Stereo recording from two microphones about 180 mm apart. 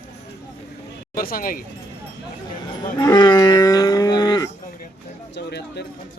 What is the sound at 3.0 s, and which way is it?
Cattle, 20° left (ahead or behind).